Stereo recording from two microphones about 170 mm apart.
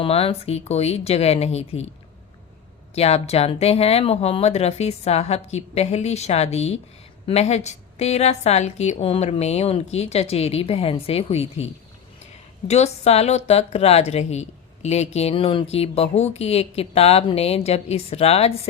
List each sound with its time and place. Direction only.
0.0 s speech: 35° left (ahead or behind)
2.9 s speech: 40° left (ahead or behind)